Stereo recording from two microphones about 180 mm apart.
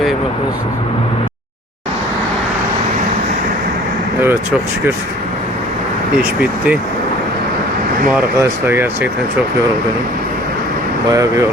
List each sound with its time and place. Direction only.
6.1 s speech: 5° right (ahead or behind)
8.1 s speech: 10° right (ahead or behind)
11.1 s speech: 20° right (ahead or behind)